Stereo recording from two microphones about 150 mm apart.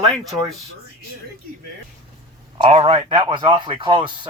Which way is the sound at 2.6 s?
40° right (ahead or behind).